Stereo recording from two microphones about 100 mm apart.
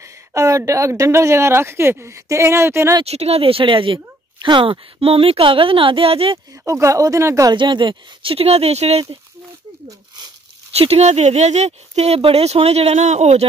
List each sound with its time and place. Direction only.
0.3 s speech: 30° right (ahead or behind)
3.0 s speech: 90° right; by 6.4 s 70° right (ahead or behind)
6.6 s speech: 30° right (ahead or behind)
7.5 s speech: 50° right (ahead or behind); by 9.0 s 90° right
9.8 s speech: 45° right (ahead or behind)
10.8 s speech: 90° right